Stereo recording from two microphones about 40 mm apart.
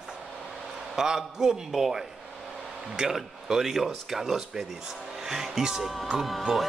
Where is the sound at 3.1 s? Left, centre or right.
Centre.